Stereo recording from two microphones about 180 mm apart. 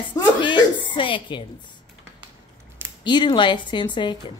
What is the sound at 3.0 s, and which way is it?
Speech, 25° left (ahead or behind).